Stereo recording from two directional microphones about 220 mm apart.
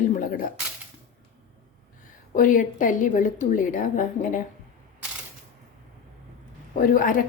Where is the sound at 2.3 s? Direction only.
35° left (ahead or behind).